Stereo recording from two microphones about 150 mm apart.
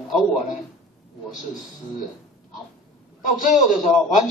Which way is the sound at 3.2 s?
60° left (ahead or behind).